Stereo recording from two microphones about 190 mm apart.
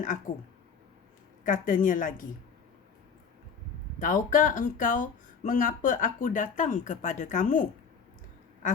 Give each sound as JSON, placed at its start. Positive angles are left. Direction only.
{"t": 0.3, "sound": "speech", "side_deg": 50}
{"t": 1.5, "sound": "speech", "side_deg": 45}
{"t": 4.0, "sound": "speech", "side_deg": 45}